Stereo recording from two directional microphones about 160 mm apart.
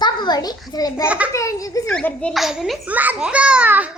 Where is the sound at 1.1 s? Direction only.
10° right (ahead or behind).